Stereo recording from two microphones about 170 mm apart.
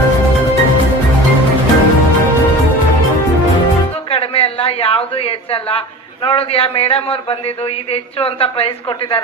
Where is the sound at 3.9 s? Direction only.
35° left (ahead or behind).